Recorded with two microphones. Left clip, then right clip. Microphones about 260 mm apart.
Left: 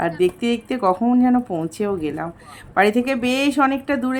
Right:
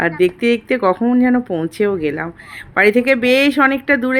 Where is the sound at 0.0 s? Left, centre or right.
Centre.